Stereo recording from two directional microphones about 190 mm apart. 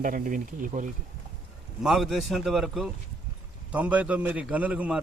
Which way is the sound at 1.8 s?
Centre (ahead or behind).